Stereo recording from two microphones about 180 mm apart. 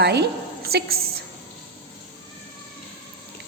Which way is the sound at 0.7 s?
60° right (ahead or behind).